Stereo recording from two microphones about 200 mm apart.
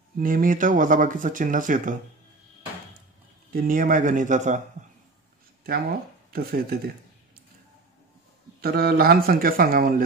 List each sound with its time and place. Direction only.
0.2 s speech: 45° right (ahead or behind)
3.5 s speech: 45° right (ahead or behind)
5.6 s a man's voice: 50° right (ahead or behind)
8.5 s a man's voice: 50° right (ahead or behind)